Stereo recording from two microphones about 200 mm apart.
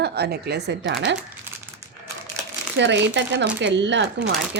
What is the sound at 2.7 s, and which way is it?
A woman's voice, 60° right (ahead or behind).